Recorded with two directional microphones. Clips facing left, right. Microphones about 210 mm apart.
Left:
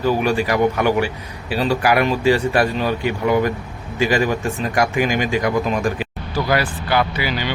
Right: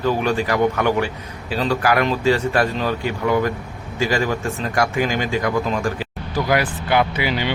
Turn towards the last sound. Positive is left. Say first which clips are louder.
# right 1 dB
turn(degrees=-25)  # may be behind; listen again after turning